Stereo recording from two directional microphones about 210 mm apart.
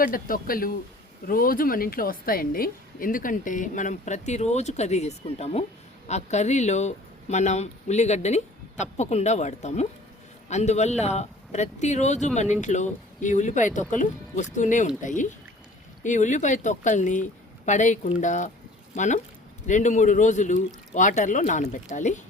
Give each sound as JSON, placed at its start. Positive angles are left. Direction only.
{"t": 0.0, "sound": "a woman's voice", "side_deg": 40}